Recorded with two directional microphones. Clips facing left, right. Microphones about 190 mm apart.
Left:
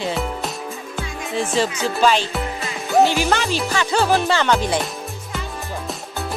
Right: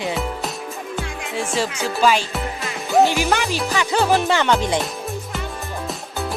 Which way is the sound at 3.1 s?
15° right (ahead or behind).